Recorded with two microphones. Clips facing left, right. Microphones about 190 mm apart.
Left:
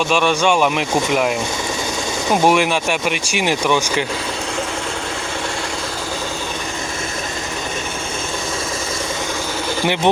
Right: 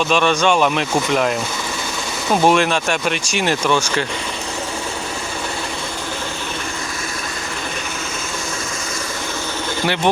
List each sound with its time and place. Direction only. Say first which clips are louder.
0.1 s speech: even; 10° left (ahead or behind)
2.4 s speech: right 1 dB; 10° left (ahead or behind)
9.8 s speech: left 1 dB; 15° left (ahead or behind)